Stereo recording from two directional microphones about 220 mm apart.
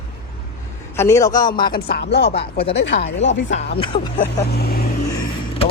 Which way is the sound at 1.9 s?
50° left (ahead or behind).